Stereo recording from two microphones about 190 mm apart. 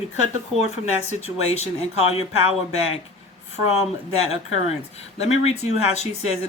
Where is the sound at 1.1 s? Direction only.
35° left (ahead or behind).